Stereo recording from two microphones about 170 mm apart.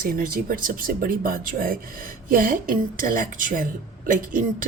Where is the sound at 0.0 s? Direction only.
55° right (ahead or behind).